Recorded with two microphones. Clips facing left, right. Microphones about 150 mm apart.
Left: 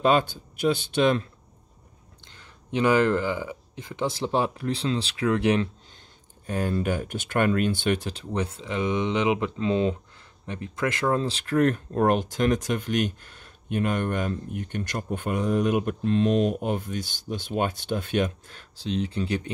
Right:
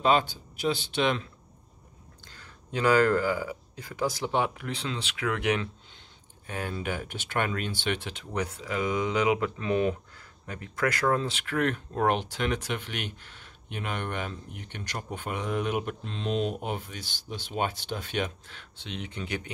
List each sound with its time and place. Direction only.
0.2 s speech: 50° left (ahead or behind)
2.2 s speech: 20° left (ahead or behind)